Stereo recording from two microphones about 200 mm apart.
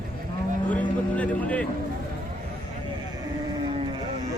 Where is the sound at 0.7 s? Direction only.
5° left (ahead or behind).